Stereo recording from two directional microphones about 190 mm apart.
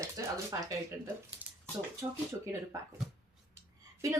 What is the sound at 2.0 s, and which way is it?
Speech, 15° right (ahead or behind).